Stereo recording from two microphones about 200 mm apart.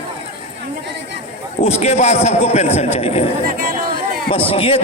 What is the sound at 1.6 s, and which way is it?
A man's voice, 30° left (ahead or behind).